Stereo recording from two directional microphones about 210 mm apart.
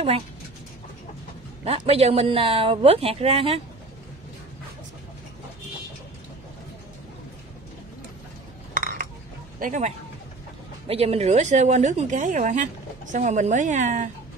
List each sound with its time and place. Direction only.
1.6 s speech: 30° right (ahead or behind)
8.7 s dishes: 40° right (ahead or behind)
9.6 s speech: 35° right (ahead or behind)